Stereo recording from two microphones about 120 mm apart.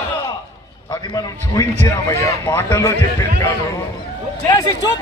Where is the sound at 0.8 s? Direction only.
35° left (ahead or behind).